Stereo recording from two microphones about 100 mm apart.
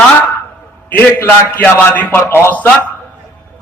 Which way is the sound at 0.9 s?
15° left (ahead or behind).